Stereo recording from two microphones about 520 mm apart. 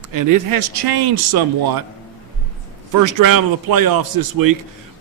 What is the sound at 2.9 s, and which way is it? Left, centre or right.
A man's voice, right.